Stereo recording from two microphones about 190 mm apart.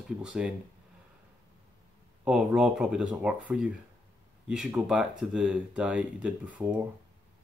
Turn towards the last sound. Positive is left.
turn(degrees=-5)  # may be behind; listen again after turning